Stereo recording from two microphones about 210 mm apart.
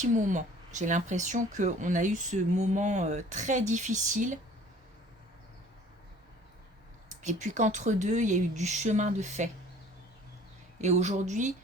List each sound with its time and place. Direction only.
0.0 s speech: 35° right (ahead or behind)
7.2 s speech: 35° right (ahead or behind)
10.8 s speech: 35° right (ahead or behind)